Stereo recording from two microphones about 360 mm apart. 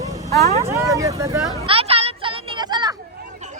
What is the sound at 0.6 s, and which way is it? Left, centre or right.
Vehicle, centre.